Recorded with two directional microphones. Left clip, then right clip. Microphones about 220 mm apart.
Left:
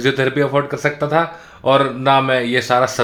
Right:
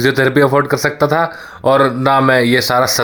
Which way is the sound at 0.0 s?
30° right (ahead or behind).